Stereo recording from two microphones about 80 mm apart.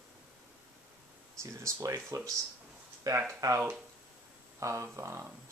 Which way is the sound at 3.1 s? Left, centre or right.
Right.